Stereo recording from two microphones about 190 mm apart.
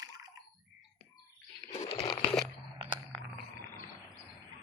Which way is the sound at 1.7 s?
35° left (ahead or behind).